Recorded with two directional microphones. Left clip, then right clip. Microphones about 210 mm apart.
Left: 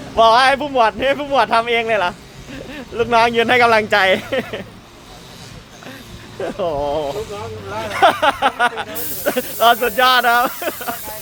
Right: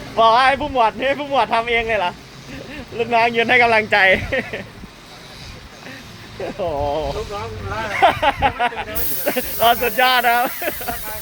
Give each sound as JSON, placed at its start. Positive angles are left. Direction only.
{"t": 0.2, "sound": "speech", "side_deg": 15}
{"t": 6.4, "sound": "speech", "side_deg": 20}